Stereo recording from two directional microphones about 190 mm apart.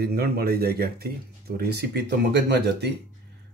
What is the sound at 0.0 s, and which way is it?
Speech, 55° right (ahead or behind).